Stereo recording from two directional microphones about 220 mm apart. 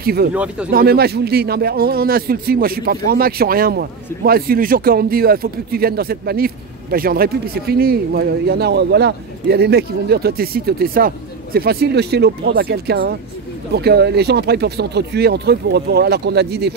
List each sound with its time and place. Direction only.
0.0 s speech: 45° right (ahead or behind)
0.3 s speech: 5° right (ahead or behind)
0.7 s speech: 45° right (ahead or behind)